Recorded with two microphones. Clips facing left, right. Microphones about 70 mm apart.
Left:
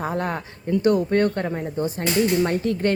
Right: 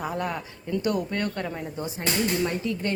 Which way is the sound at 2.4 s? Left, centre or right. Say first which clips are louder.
Left 6 dB; left.